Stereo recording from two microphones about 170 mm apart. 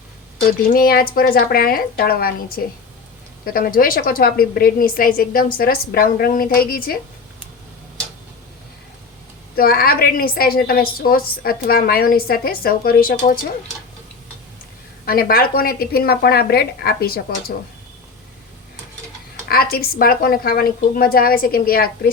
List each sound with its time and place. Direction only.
0.7 s a woman's voice: 60° left (ahead or behind)
9.6 s a woman's voice: 60° left (ahead or behind)
15.0 s a woman's voice: 60° left (ahead or behind)
19.5 s a woman's voice: 60° left (ahead or behind)